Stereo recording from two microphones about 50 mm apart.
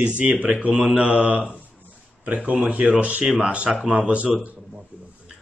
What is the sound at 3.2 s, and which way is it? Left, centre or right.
A man's voice, centre.